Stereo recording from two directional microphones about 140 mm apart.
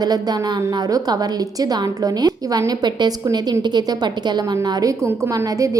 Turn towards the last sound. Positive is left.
turn(degrees=-25)  # may be behind; listen again after turning